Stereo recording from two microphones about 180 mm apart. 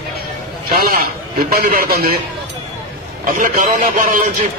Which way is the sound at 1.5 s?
55° right (ahead or behind).